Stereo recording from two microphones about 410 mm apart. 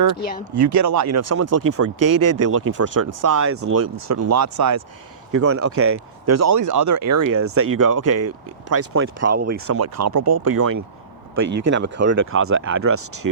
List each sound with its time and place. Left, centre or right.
0.5 s speech: right
11.7 s speech: right
13.2 s speech: right